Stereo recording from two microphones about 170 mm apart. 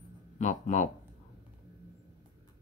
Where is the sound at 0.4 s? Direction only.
45° left (ahead or behind).